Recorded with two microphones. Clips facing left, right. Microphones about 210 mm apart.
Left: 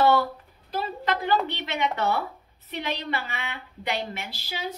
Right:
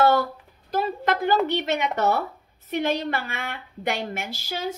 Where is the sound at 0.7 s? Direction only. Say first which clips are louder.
Right 4 dB; 50° right (ahead or behind).